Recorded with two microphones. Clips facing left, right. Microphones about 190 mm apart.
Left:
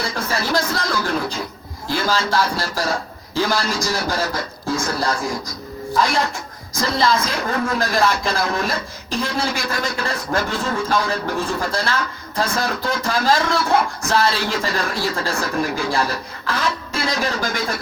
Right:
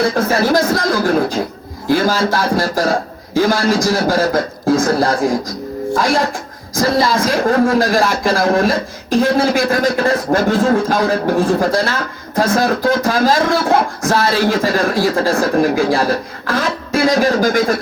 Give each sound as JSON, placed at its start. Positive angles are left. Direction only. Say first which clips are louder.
{"t": 0.0, "sound": "a man's voice", "louder": "right 10 dB", "side_deg": -50}